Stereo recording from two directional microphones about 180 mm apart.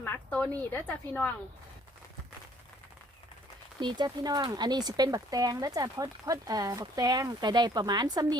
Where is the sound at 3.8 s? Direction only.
25° right (ahead or behind).